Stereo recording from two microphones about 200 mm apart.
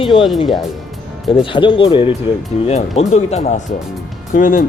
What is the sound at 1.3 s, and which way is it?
Speech, 25° left (ahead or behind).